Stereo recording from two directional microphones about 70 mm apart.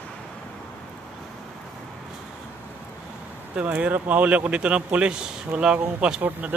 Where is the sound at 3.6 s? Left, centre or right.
Right.